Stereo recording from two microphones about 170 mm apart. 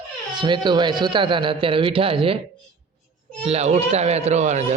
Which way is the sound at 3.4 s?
40° right (ahead or behind).